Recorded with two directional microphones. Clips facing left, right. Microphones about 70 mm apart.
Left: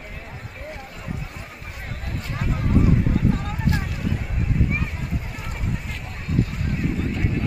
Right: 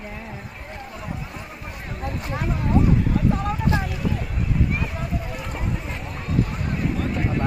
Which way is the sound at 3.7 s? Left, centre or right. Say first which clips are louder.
Right 1 dB; right.